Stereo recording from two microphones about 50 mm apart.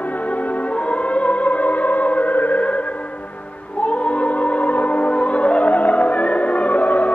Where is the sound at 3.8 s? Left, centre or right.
Left.